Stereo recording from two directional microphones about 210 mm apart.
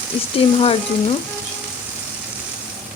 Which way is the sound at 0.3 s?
25° left (ahead or behind).